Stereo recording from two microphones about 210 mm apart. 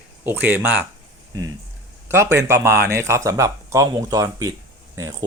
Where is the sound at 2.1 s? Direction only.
10° right (ahead or behind).